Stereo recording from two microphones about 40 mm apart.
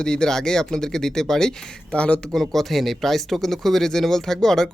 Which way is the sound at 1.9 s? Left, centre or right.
Left.